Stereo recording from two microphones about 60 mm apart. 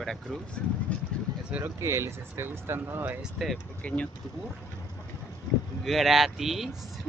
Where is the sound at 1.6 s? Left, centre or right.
Right.